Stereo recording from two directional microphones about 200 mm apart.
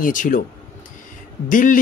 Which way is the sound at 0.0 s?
40° left (ahead or behind).